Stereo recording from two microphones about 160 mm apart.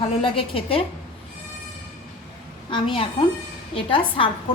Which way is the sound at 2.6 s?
30° left (ahead or behind).